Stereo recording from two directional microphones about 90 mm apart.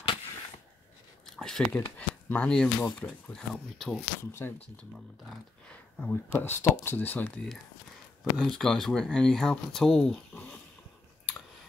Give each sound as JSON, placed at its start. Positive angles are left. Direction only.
{"t": 1.2, "sound": "speech", "side_deg": 5}
{"t": 4.2, "sound": "speech", "side_deg": 30}
{"t": 5.7, "sound": "speech", "side_deg": 15}
{"t": 7.4, "sound": "speech", "side_deg": 5}
{"t": 10.3, "sound": "a sound", "side_deg": 10}